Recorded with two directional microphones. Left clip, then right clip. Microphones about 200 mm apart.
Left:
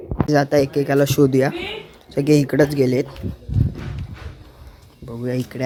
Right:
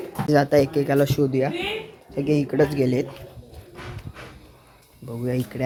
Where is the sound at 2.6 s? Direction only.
15° left (ahead or behind).